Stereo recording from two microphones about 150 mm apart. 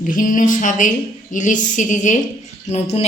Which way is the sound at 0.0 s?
60° left (ahead or behind).